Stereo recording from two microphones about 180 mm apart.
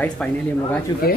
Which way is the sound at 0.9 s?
25° left (ahead or behind).